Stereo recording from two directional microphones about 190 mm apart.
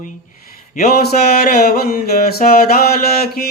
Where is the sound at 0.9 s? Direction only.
55° left (ahead or behind).